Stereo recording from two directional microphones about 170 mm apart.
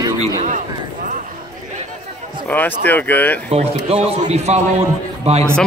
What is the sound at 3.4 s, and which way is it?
A man's voice, 35° right (ahead or behind).